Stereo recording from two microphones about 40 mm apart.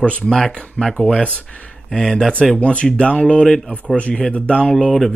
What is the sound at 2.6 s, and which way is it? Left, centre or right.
Speech, left.